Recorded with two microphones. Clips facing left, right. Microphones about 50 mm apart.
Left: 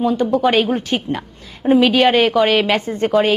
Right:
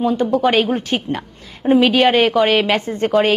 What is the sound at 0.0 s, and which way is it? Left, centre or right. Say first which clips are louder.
A woman's voice: even; right.